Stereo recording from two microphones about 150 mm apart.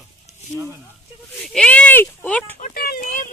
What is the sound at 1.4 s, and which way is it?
Speech, 5° left (ahead or behind).